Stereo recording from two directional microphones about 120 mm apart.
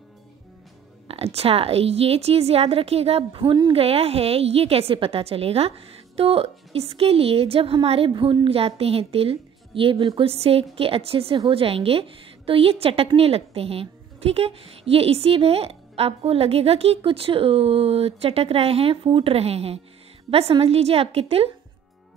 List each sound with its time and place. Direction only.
1.0 s a woman's voice: 55° right (ahead or behind); by 3.7 s 40° right (ahead or behind)
3.7 s a woman's voice: 55° right (ahead or behind)